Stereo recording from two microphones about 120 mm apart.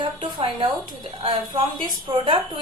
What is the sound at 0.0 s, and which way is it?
Speech, 45° right (ahead or behind).